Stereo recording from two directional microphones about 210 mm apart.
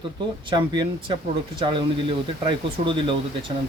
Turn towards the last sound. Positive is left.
turn(degrees=-25)  # may be behind; listen again after turning